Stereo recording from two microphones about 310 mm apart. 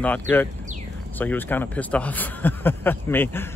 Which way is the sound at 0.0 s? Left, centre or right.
Centre.